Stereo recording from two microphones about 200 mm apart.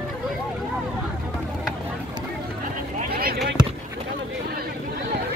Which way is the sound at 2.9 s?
50° right (ahead or behind).